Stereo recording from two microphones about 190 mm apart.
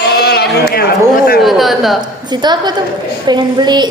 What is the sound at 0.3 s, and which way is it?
Speech, 60° left (ahead or behind).